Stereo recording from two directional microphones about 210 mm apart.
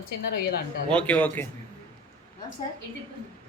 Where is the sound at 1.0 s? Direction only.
5° left (ahead or behind).